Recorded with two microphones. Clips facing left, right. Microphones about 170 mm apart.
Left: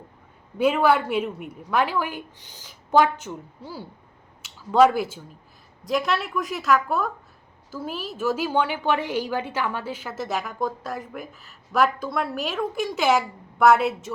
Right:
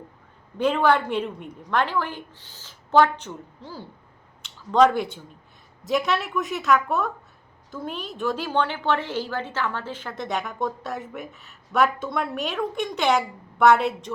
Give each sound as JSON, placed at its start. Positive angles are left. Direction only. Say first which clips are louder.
{"t": 0.6, "sound": "a woman's voice", "louder": "left 1 dB", "side_deg": 5}